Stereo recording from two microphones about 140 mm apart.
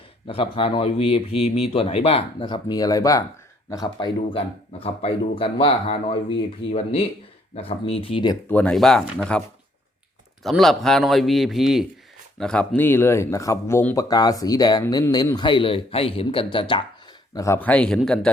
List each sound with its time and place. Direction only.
0.3 s speech: 40° left (ahead or behind)
8.4 s a man's voice: 10° left (ahead or behind)
10.4 s a man's voice: centre (ahead or behind); by 16.8 s 35° left (ahead or behind)
17.3 s speech: 20° left (ahead or behind); by 18.3 s 5° left (ahead or behind)